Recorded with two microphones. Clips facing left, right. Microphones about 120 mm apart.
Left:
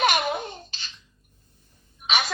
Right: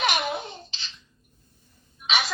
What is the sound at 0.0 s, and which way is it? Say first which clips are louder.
Baby laughter: left 3 dB; 45° left (ahead or behind).